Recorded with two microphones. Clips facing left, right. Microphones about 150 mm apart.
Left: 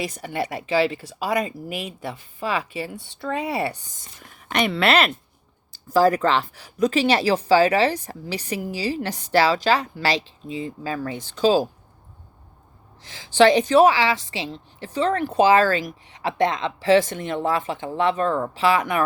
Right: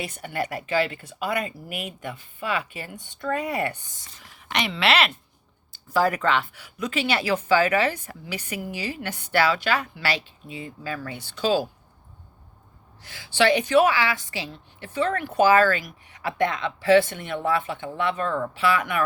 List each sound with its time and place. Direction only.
0.0 s speech: 35° left (ahead or behind)
13.1 s speech: 40° left (ahead or behind)